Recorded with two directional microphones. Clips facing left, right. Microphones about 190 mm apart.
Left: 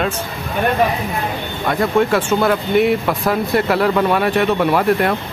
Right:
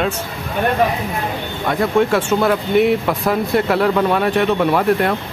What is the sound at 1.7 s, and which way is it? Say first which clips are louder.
Speech: even; centre (ahead or behind).